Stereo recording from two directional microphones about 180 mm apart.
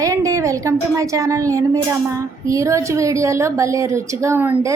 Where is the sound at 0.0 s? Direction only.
20° right (ahead or behind).